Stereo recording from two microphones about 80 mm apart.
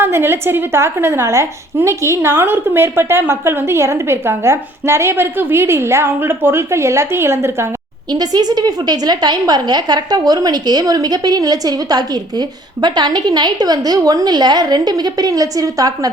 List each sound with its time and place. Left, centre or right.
0.0 s a woman's voice: right
8.1 s a woman's voice: right